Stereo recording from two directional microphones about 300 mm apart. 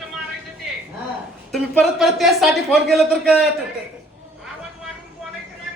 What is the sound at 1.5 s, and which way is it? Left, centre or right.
Speech, centre.